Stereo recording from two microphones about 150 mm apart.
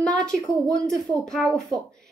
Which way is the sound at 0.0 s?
5° left (ahead or behind).